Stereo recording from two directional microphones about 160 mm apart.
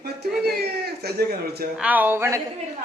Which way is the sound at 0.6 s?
80° right.